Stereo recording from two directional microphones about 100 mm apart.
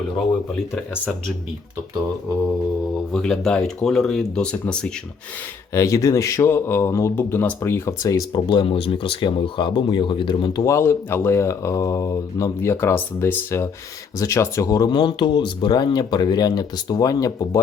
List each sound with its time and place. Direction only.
3.1 s speech: 5° left (ahead or behind)
5.7 s speech: 30° left (ahead or behind)
8.4 s speech: 55° left (ahead or behind)
10.6 s speech: 30° left (ahead or behind)